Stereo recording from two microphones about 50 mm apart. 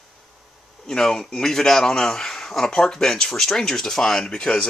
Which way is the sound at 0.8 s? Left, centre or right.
Centre.